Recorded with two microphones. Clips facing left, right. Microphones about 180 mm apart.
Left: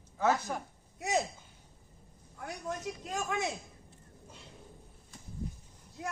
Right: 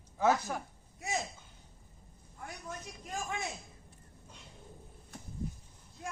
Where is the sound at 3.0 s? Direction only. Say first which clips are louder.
Left 3 dB; 75° left (ahead or behind).